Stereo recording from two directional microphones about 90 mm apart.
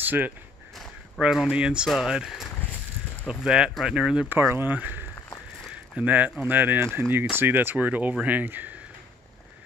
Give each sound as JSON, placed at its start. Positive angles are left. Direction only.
{"t": 0.0, "sound": "speech", "side_deg": -20}
{"t": 4.3, "sound": "speech", "side_deg": -25}
{"t": 5.7, "sound": "a sound", "side_deg": -15}
{"t": 6.4, "sound": "speech", "side_deg": -20}